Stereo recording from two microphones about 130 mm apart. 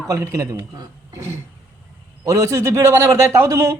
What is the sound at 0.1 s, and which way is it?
Speech, 25° right (ahead or behind).